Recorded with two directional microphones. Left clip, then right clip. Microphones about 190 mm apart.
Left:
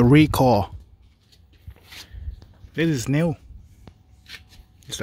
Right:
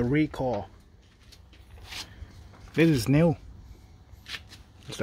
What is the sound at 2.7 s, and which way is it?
Speech, centre (ahead or behind).